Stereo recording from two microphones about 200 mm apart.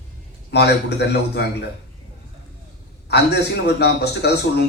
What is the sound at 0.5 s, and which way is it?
Speech, 55° left (ahead or behind).